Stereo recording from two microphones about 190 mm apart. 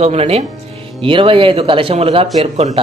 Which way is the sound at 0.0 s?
30° right (ahead or behind).